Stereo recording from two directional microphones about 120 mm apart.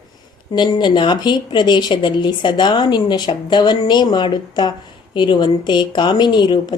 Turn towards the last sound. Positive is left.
turn(degrees=40)  # may be behind; listen again after turning